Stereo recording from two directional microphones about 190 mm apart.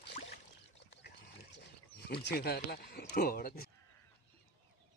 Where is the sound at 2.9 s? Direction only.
60° left (ahead or behind).